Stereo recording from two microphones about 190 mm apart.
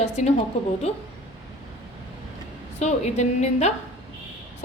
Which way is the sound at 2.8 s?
35° left (ahead or behind).